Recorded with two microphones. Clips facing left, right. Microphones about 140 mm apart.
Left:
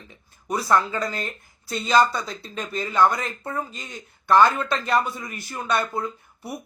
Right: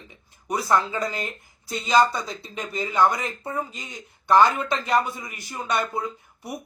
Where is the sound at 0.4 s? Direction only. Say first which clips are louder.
Left 1 dB; 15° right (ahead or behind).